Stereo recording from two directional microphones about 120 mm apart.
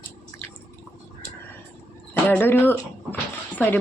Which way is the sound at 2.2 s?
15° left (ahead or behind).